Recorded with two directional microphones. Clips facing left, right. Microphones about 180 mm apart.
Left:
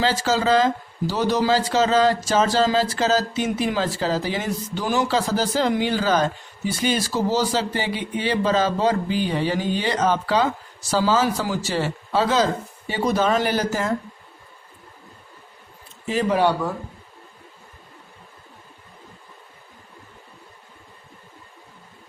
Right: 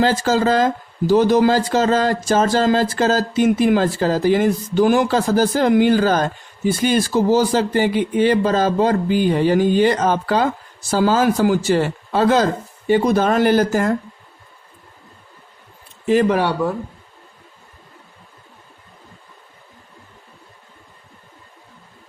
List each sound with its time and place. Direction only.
0.0 s speech: 50° right (ahead or behind)
16.0 s speech: 55° right (ahead or behind)